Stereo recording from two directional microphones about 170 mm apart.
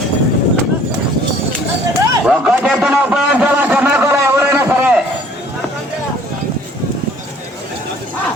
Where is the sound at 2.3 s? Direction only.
5° right (ahead or behind).